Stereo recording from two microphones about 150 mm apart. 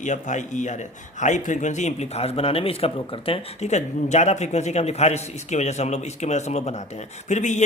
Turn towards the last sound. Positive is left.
turn(degrees=50)  # may be behind; listen again after turning